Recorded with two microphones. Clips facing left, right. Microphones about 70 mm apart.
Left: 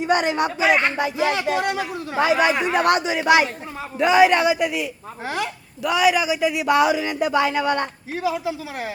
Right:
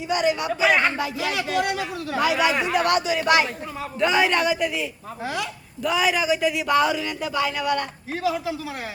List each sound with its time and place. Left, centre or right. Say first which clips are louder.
0.1 s a man's voice: left 2 dB; left
0.9 s a man's voice: left 4 dB; left
3.2 s a man's voice: left 3 dB; centre
5.2 s speech: left 2 dB; left
5.8 s speech: left 3 dB; centre
7.3 s a man's voice: left 3 dB; left